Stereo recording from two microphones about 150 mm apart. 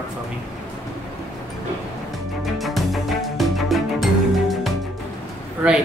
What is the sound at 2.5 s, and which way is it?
Music, centre (ahead or behind).